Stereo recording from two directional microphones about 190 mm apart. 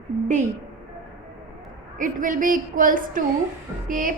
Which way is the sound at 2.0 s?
45° right (ahead or behind).